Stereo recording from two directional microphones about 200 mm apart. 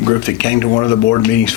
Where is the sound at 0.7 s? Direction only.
15° left (ahead or behind).